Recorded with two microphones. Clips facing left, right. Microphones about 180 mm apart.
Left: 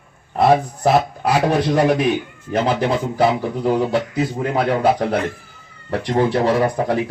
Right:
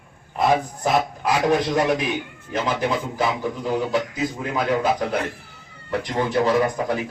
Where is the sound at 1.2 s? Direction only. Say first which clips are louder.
Left 3 dB; 30° left (ahead or behind).